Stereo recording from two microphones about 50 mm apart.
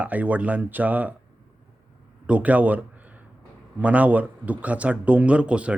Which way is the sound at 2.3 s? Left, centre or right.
Right.